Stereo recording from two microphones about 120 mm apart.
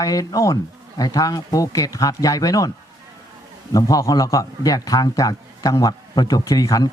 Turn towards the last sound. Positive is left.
turn(degrees=30)  # may be behind; listen again after turning